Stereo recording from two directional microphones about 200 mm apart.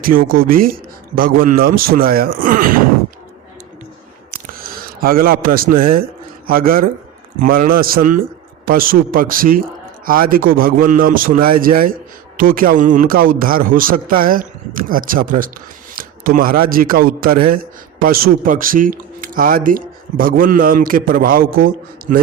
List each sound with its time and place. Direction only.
0.0 s speech: 45° right (ahead or behind)
4.3 s a sound: 45° right (ahead or behind)
5.8 s a man's voice: 45° right (ahead or behind)